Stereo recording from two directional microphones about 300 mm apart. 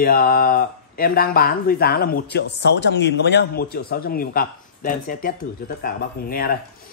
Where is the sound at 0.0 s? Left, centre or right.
Left.